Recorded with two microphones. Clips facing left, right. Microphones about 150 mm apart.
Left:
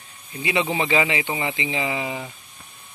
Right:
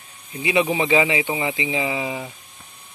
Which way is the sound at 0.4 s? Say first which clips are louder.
Right 3 dB; 20° right (ahead or behind).